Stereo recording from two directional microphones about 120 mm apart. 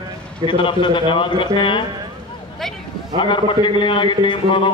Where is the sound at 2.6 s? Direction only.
5° left (ahead or behind).